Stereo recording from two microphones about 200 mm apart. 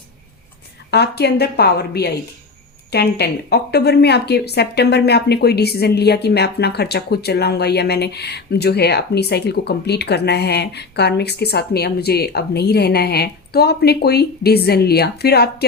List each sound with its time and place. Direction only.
0.9 s a woman's voice: 55° left (ahead or behind)